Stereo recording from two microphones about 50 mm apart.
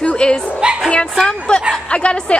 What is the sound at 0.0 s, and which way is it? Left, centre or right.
Bow-wow, centre.